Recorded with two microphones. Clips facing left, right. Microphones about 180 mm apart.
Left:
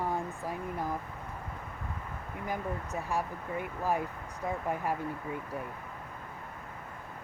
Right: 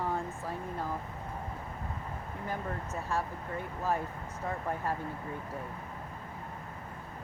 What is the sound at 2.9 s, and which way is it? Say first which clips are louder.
Speech: even; 15° left (ahead or behind).